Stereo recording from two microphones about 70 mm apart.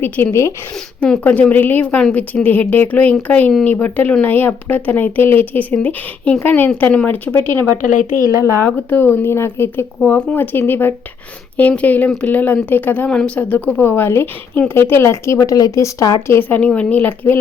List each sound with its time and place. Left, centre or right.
0.0 s speech: left
0.9 s speech: centre
13.1 s speech: centre; by 15.4 s left
15.4 s a woman's voice: left
16.4 s speech: left